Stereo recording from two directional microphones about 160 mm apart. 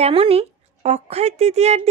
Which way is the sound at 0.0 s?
35° right (ahead or behind).